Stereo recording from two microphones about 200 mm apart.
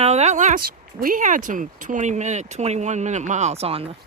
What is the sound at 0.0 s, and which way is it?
Speech, 35° right (ahead or behind).